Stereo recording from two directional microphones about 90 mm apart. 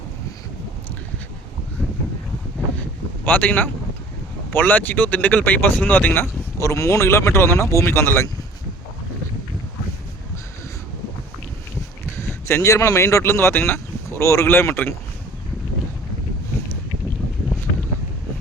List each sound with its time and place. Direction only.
3.2 s speech: 20° left (ahead or behind)
6.6 s speech: 35° left (ahead or behind)
12.1 s speech: 25° left (ahead or behind)